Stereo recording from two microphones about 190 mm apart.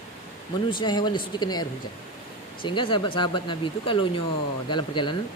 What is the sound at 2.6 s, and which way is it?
A man's voice, 25° left (ahead or behind).